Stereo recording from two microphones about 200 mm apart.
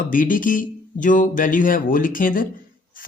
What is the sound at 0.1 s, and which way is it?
Speech, 45° left (ahead or behind).